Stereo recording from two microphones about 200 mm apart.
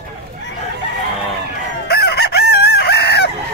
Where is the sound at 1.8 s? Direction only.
55° left (ahead or behind).